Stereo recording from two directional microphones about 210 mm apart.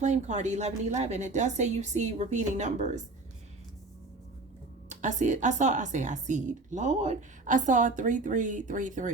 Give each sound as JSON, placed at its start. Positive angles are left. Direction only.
{"t": 0.0, "sound": "a woman's voice", "side_deg": -35}
{"t": 4.9, "sound": "a woman's voice", "side_deg": -35}